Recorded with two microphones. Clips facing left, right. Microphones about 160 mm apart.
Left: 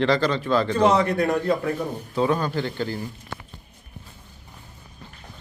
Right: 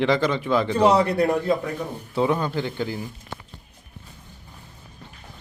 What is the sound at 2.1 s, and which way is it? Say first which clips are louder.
Speech: even; 20° right (ahead or behind).